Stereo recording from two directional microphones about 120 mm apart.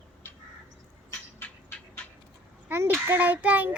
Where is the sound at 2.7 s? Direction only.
20° right (ahead or behind).